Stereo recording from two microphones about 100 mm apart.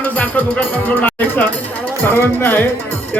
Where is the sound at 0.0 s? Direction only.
15° left (ahead or behind).